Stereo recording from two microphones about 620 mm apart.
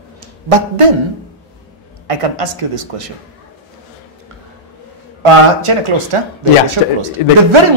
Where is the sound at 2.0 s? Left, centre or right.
Right.